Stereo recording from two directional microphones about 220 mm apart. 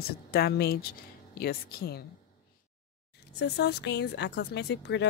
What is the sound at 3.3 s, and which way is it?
Speech, 50° left (ahead or behind).